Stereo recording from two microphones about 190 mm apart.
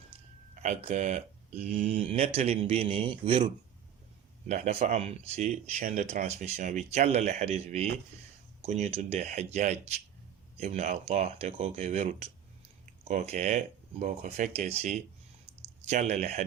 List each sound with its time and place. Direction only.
0.5 s speech: 40° right (ahead or behind)